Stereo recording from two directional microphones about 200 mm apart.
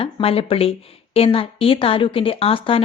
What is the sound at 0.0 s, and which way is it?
Speech, 30° left (ahead or behind).